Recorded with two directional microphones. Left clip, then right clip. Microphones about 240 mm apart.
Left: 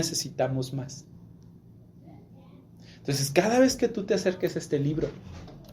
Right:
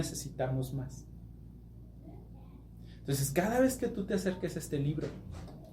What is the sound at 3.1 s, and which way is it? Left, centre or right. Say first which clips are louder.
Speech: left 8 dB; left.